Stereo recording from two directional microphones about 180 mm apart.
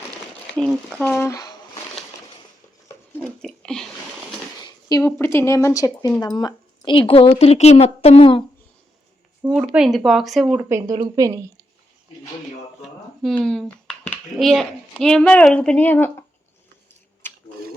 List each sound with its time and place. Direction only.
0.5 s speech: 5° left (ahead or behind)
1.1 s speech: 15° left (ahead or behind)
3.2 s speech: 5° left (ahead or behind)
4.9 s speech: 20° left (ahead or behind)
9.4 s speech: 5° right (ahead or behind)
12.8 s speech: centre (ahead or behind)